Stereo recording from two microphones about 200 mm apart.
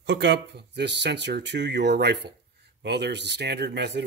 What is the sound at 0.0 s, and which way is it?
Speech, 60° right (ahead or behind).